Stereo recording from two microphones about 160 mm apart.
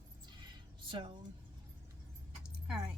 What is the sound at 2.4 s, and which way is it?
Keys jangling, 5° right (ahead or behind).